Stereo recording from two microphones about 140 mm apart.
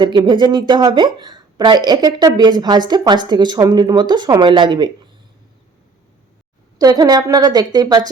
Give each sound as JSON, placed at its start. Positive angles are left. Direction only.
{"t": 0.0, "sound": "a woman's voice", "side_deg": -35}
{"t": 6.7, "sound": "a woman's voice", "side_deg": -25}